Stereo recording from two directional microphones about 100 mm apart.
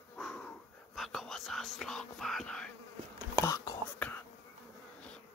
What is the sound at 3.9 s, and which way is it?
Insect, 20° left (ahead or behind).